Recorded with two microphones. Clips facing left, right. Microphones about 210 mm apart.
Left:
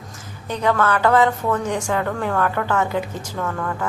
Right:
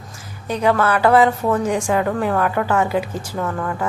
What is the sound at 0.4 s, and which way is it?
A woman's voice, 10° right (ahead or behind).